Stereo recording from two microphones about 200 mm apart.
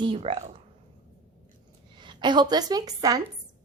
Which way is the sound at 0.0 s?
25° right (ahead or behind).